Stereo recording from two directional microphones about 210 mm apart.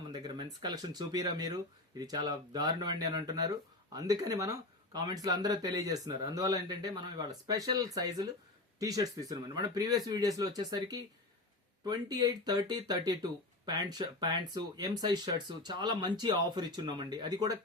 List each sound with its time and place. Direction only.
0.1 s speech: 20° right (ahead or behind)